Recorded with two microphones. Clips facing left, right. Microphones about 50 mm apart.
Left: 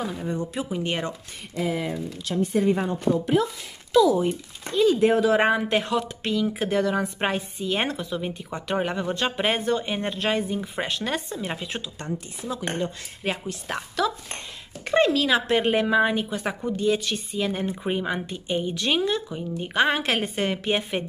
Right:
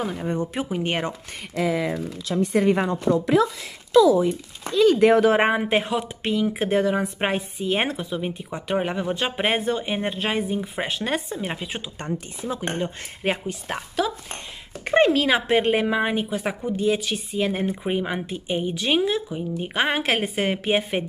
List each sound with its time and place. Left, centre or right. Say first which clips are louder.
0.0 s speech: right 3 dB; right
2.0 s speech: right 2 dB; right
4.7 s speech: right 3 dB; right
5.4 s speech: right 1 dB; right
12.4 s speech: right 1 dB; right
13.5 s speech: right 1 dB; centre
14.9 s speech: right 2 dB; right